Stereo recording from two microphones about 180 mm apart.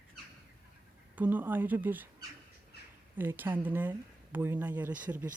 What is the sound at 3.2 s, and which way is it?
Speech, 10° right (ahead or behind).